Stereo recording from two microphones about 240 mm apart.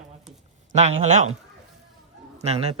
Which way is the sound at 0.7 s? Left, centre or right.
Right.